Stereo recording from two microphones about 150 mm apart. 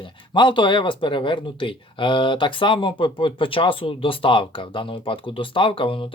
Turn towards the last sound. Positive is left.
turn(degrees=35)  # may be behind; listen again after turning